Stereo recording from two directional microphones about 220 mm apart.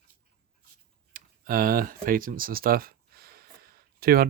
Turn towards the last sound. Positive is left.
turn(degrees=-45)  # may be behind; listen again after turning